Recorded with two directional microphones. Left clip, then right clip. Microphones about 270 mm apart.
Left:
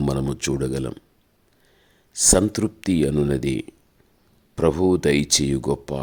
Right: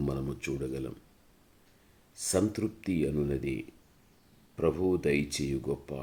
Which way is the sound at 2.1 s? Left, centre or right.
Left.